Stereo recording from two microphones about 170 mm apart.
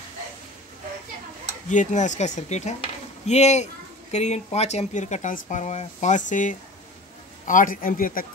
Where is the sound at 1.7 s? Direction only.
45° left (ahead or behind).